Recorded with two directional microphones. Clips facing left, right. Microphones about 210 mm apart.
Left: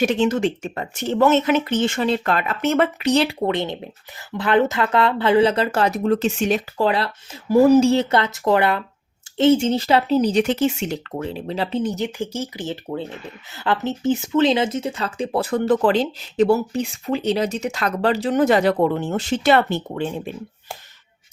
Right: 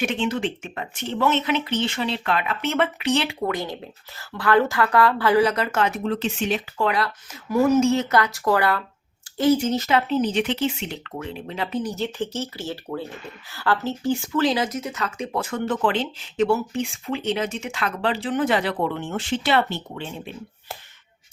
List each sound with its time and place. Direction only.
0.0 s speech: 40° left (ahead or behind)
3.4 s speech: 25° left (ahead or behind); by 6.8 s 45° left (ahead or behind)
6.8 s speech: 30° left (ahead or behind); by 20.3 s 50° left (ahead or behind)